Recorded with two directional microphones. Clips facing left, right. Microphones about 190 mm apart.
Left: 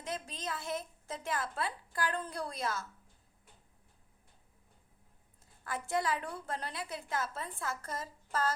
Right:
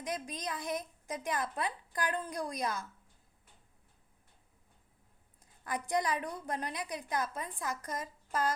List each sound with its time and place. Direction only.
0.0 s a woman's voice: 15° right (ahead or behind)
5.6 s a woman's voice: 15° right (ahead or behind)